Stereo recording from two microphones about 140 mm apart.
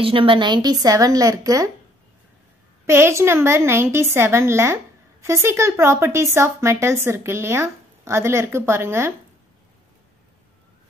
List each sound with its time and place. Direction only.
0.0 s a woman's voice: 40° right (ahead or behind); by 1.7 s 25° right (ahead or behind)
2.9 s a woman's voice: 20° right (ahead or behind)